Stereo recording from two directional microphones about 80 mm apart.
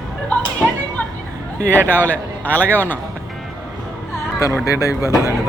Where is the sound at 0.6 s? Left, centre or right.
Centre.